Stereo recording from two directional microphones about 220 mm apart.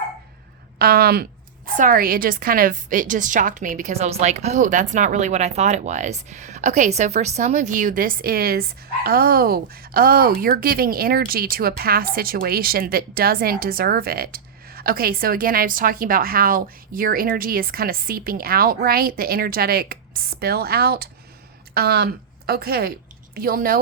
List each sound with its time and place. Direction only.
0.8 s a woman's voice: 45° right (ahead or behind)